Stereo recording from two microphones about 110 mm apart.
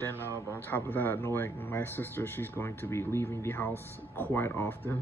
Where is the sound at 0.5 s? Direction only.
20° left (ahead or behind).